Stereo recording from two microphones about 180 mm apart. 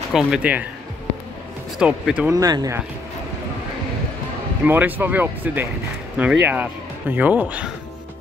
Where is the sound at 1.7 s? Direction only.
5° right (ahead or behind).